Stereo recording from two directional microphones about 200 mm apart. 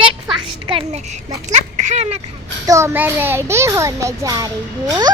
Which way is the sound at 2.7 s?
15° right (ahead or behind).